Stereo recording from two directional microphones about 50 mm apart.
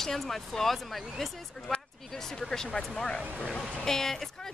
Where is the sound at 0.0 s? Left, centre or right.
Centre.